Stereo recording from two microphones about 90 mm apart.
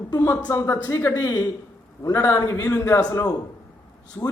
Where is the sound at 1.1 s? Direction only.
45° left (ahead or behind).